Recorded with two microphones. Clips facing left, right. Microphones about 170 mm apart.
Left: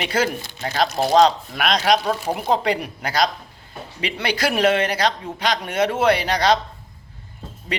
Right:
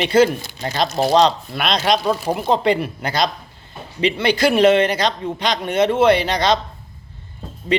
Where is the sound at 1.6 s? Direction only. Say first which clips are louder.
Even; 10° left (ahead or behind).